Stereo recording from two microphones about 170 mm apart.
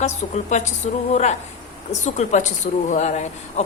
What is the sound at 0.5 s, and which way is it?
A woman's voice, 45° left (ahead or behind).